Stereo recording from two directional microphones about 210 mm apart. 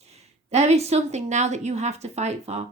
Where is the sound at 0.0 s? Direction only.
30° right (ahead or behind).